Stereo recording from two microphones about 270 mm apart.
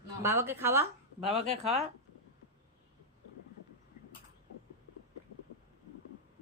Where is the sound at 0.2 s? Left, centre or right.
Centre.